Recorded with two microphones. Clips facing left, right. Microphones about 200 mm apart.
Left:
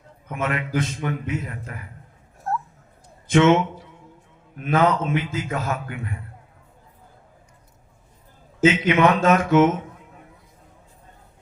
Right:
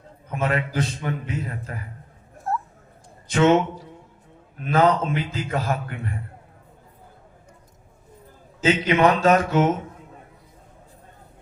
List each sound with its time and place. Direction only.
0.3 s a man's voice: 30° right (ahead or behind)
2.5 s dog: centre (ahead or behind)
3.2 s speech: 35° right (ahead or behind)
4.6 s a man's voice: 35° right (ahead or behind)
8.6 s a man's voice: 35° right (ahead or behind)